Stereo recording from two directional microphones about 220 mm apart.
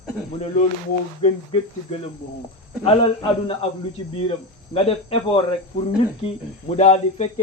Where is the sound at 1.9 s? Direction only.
30° left (ahead or behind).